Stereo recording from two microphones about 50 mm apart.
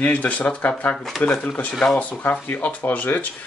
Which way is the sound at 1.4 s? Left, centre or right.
Left.